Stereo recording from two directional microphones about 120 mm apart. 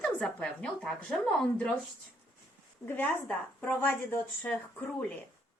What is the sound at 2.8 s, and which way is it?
Speech, 15° left (ahead or behind).